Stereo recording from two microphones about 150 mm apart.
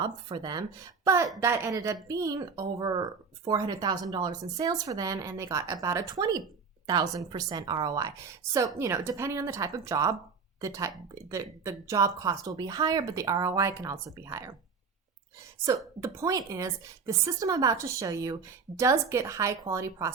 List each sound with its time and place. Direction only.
0.0 s speech: 30° right (ahead or behind)
16.0 s speech: 20° right (ahead or behind)